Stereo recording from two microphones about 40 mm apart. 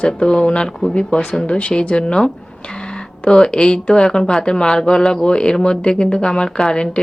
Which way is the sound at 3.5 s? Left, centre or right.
Left.